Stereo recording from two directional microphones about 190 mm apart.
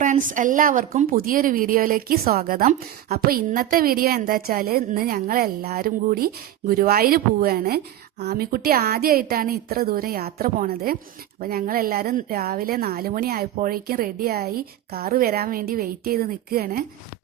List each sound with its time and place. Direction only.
0.0 s speech: 45° right (ahead or behind)